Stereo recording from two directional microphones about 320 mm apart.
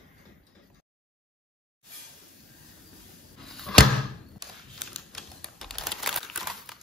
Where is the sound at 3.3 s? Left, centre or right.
Centre.